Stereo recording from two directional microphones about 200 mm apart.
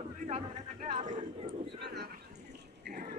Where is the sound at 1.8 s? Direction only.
55° right (ahead or behind).